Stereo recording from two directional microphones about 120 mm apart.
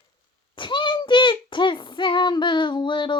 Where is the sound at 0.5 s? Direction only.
40° left (ahead or behind).